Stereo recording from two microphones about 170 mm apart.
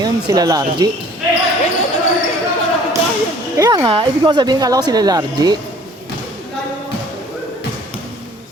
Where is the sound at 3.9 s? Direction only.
30° right (ahead or behind).